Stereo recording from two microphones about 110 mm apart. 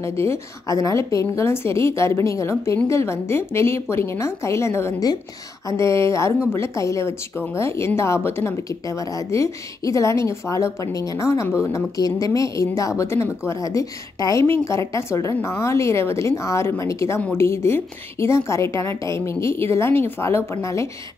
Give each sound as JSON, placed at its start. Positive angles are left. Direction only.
{"t": 0.0, "sound": "a woman's voice", "side_deg": 25}